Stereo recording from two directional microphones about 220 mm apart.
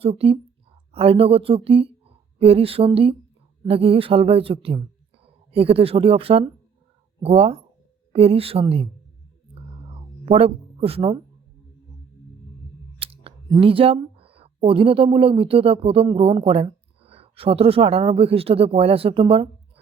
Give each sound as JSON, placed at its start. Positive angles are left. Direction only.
{"t": 0.0, "sound": "speech", "side_deg": -25}
{"t": 10.2, "sound": "speech", "side_deg": -25}
{"t": 13.0, "sound": "speech", "side_deg": -25}